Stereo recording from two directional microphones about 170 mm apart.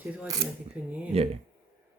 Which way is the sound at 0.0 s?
10° right (ahead or behind).